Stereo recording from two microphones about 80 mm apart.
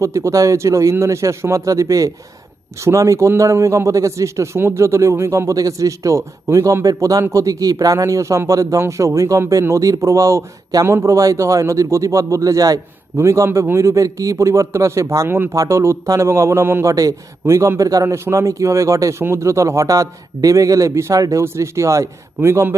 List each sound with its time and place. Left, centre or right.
0.0 s a man's voice: right
16.8 s a man's voice: right